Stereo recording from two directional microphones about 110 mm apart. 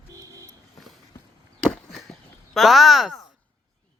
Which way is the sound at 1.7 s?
5° left (ahead or behind).